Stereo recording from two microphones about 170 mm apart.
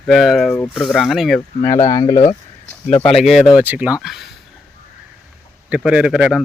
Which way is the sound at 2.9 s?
35° left (ahead or behind).